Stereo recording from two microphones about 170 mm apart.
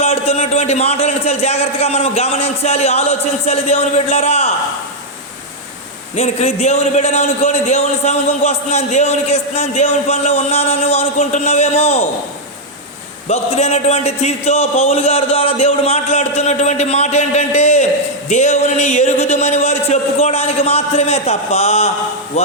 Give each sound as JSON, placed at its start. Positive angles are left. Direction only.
{"t": 0.0, "sound": "a man's voice", "side_deg": 40}
{"t": 6.1, "sound": "a man's voice", "side_deg": 40}
{"t": 13.2, "sound": "a man's voice", "side_deg": 40}